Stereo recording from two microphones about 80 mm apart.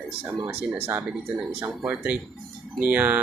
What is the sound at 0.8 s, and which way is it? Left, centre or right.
Speech, right.